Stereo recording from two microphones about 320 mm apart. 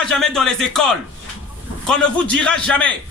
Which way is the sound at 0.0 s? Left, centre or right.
Centre.